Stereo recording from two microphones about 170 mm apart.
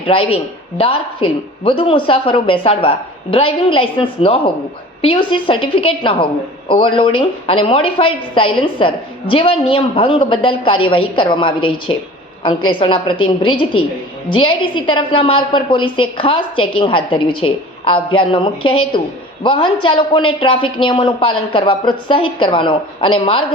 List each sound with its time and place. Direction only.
0.0 s a woman's voice: 30° left (ahead or behind)